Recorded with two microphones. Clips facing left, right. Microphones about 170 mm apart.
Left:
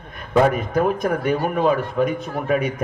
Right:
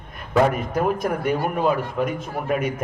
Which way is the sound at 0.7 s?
10° right (ahead or behind).